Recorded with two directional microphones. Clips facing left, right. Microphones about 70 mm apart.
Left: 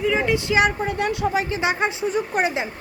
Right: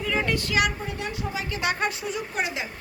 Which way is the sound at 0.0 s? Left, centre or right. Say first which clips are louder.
Left 5 dB; centre.